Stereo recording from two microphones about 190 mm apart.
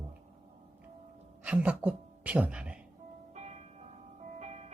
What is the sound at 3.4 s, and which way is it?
Music, 35° right (ahead or behind).